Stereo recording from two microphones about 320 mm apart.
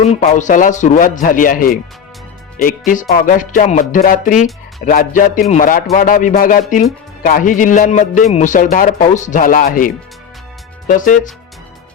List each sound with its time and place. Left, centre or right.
0.0 s a man's voice: left